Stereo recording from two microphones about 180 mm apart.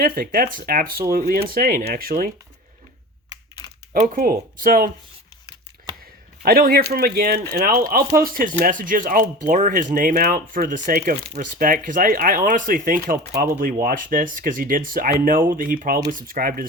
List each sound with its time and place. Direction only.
0.0 s speech: 55° right (ahead or behind)
3.9 s speech: 40° right (ahead or behind)
4.2 s speech: 55° right (ahead or behind)
6.4 s speech: 55° right (ahead or behind)